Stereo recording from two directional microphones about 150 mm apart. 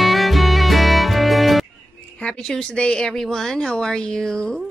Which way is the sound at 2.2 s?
5° left (ahead or behind).